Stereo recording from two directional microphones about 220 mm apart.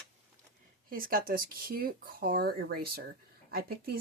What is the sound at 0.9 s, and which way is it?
Speech, 40° right (ahead or behind).